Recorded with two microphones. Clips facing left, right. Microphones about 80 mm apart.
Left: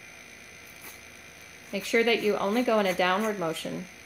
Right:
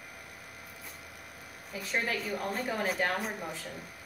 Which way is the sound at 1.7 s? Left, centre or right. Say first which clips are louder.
Left 9 dB; left.